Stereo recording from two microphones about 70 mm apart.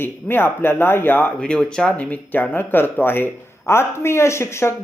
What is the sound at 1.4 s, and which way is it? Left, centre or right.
Speech, centre.